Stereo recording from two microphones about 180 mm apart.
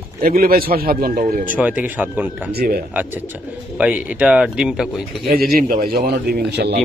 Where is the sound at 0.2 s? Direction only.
55° right (ahead or behind).